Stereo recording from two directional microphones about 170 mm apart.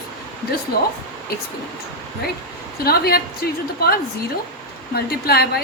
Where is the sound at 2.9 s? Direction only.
65° left (ahead or behind).